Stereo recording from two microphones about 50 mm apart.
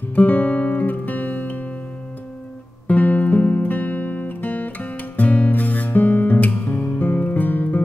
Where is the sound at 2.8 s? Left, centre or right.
Left.